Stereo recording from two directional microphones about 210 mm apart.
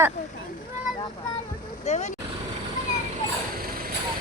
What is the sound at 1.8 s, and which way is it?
Speech, 35° left (ahead or behind).